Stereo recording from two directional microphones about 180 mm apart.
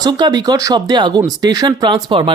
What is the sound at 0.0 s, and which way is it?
Speech, 20° right (ahead or behind).